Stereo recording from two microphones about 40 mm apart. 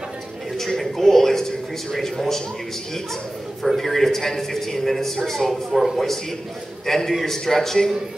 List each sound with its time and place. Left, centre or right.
0.6 s a sound: centre
1.9 s a man's voice: centre
3.6 s a man's voice: centre
5.5 s speech: centre
6.9 s a man's voice: centre